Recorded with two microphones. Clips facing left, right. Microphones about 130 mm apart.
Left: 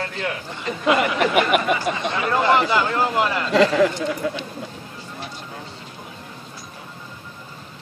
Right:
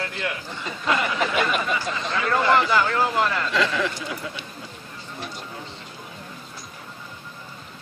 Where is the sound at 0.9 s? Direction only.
65° left (ahead or behind).